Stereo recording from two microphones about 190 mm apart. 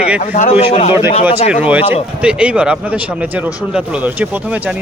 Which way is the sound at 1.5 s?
5° right (ahead or behind).